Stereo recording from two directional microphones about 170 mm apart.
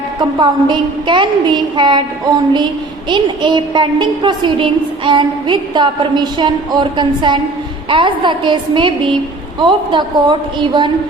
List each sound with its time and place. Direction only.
0.2 s a woman's voice: 25° right (ahead or behind)